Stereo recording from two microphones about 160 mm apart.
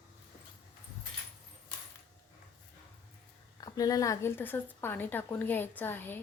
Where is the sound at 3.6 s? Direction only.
25° left (ahead or behind).